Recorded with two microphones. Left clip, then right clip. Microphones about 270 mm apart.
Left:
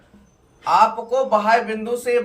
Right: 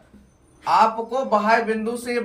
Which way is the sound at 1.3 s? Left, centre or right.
Centre.